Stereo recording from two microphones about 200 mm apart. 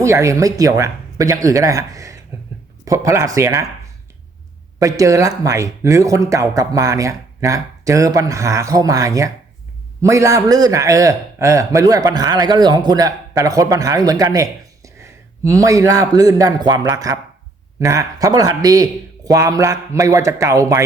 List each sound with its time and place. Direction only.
0.0 s a man's voice: 15° right (ahead or behind)
4.8 s a man's voice: 15° right (ahead or behind)